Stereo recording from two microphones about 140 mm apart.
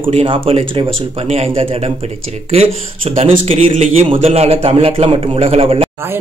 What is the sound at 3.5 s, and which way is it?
A man's voice, 45° right (ahead or behind).